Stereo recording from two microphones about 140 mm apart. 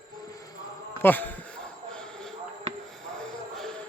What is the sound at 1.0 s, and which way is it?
Speech, 10° left (ahead or behind).